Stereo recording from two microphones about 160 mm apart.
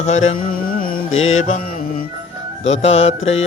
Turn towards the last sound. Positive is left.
turn(degrees=40)  # may be behind; listen again after turning